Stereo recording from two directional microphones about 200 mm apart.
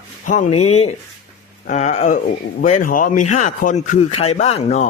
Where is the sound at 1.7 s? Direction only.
35° left (ahead or behind).